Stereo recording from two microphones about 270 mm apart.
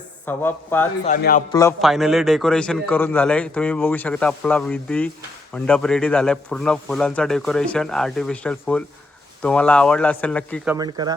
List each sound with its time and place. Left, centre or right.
0.3 s a man's voice: centre
1.0 s a man's voice: left
1.8 s a man's voice: centre
10.7 s speech: centre